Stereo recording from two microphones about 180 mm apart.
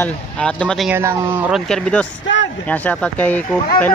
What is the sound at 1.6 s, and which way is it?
Speech, 5° left (ahead or behind).